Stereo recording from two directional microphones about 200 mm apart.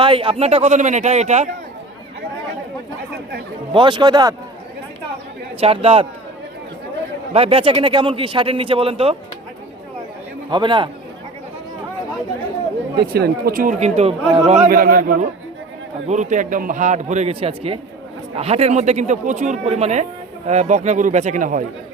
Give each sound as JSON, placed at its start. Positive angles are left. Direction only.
{"t": 0.0, "sound": "a man's voice", "side_deg": -25}
{"t": 3.7, "sound": "speech", "side_deg": -25}
{"t": 5.5, "sound": "speech", "side_deg": -30}
{"t": 7.3, "sound": "speech", "side_deg": -30}
{"t": 10.5, "sound": "speech", "side_deg": -25}
{"t": 13.0, "sound": "a man's voice", "side_deg": -50}